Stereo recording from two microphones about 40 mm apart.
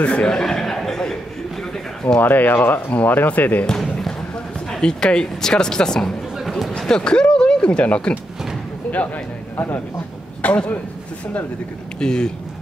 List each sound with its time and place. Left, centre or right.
0.0 s speech: left
0.3 s a sound: centre
2.2 s speech: left
3.0 s speech: left
4.6 s speech: centre
8.8 s a sound: left
9.6 s speech: left
10.4 s speech: left
12.0 s speech: centre